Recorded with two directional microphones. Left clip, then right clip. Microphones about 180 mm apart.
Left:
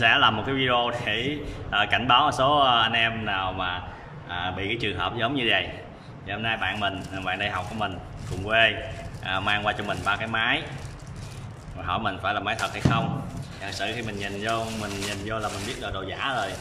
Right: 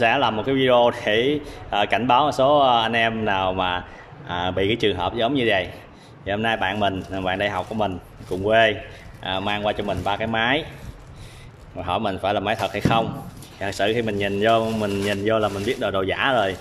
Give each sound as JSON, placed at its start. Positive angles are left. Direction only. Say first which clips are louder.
{"t": 0.0, "sound": "a man's voice", "louder": "right 1 dB", "side_deg": -25}
{"t": 11.8, "sound": "speech", "louder": "right 4 dB", "side_deg": -30}